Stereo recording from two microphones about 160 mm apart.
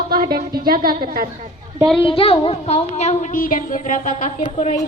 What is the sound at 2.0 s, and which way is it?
A woman's voice, 35° left (ahead or behind).